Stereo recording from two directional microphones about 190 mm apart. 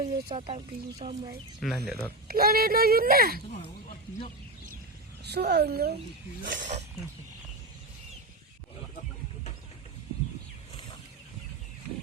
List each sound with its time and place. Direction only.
0.0 s speech: 30° right (ahead or behind)
1.6 s speech: centre (ahead or behind)
2.2 s speech: 50° right (ahead or behind)
5.2 s a child's voice: 60° right (ahead or behind)
6.4 s speech: 75° right (ahead or behind)